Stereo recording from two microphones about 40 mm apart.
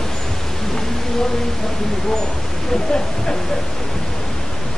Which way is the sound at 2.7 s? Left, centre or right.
Centre.